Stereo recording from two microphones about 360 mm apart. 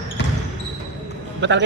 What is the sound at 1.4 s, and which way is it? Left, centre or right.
Speech, right.